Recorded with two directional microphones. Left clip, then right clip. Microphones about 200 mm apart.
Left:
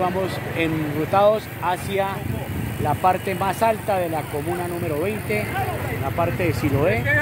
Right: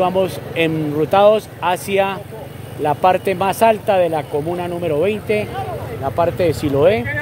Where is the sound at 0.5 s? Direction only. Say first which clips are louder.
Right 7 dB; 50° right (ahead or behind).